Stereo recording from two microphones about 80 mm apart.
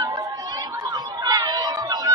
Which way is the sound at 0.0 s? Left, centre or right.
Right.